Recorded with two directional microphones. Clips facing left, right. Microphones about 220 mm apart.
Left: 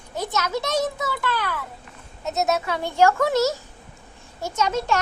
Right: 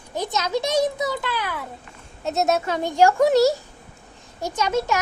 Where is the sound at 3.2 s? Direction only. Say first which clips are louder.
Right 4 dB; 35° right (ahead or behind).